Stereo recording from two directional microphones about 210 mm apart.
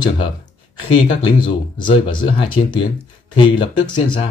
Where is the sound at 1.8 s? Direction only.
25° left (ahead or behind).